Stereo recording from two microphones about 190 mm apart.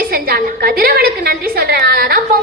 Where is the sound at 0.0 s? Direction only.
50° right (ahead or behind).